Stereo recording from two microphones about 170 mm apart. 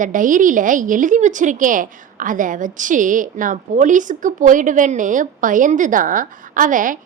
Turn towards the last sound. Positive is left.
turn(degrees=-50)  # may be behind; listen again after turning